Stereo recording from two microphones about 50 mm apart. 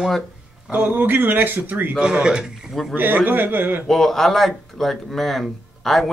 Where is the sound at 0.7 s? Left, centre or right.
Right.